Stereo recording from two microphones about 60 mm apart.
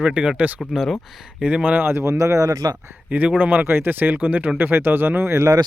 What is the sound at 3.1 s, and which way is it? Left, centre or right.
Speech, right.